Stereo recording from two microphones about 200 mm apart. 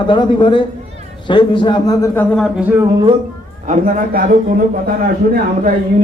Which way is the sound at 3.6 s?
40° right (ahead or behind).